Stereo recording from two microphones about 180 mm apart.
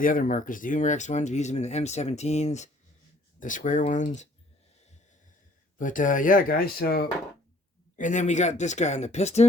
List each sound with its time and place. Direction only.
0.0 s speech: 50° left (ahead or behind)
5.8 s speech: 45° left (ahead or behind)
7.9 s speech: 45° left (ahead or behind)